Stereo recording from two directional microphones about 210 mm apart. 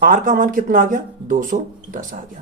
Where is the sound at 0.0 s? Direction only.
40° right (ahead or behind).